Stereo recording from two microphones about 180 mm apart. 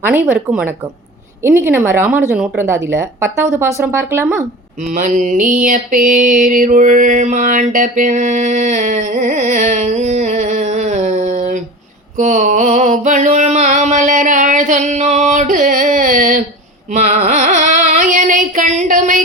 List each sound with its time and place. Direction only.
0.0 s a woman's voice: 10° right (ahead or behind)
4.9 s mantra: 45° right (ahead or behind)
12.1 s a sound: 40° right (ahead or behind)
16.9 s carnatic music: 40° right (ahead or behind)